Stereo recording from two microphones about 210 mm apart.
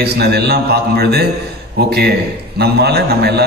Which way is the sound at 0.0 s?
50° right (ahead or behind).